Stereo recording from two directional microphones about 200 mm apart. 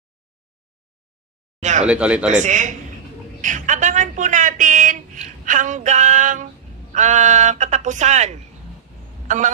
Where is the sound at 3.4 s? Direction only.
40° right (ahead or behind).